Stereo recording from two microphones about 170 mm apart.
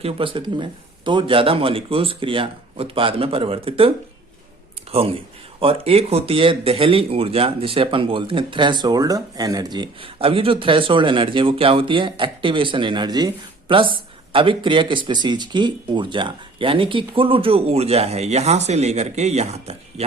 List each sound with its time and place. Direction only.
0.0 s speech: 30° right (ahead or behind)